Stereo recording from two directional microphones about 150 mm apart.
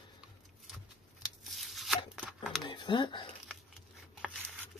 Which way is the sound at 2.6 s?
30° left (ahead or behind).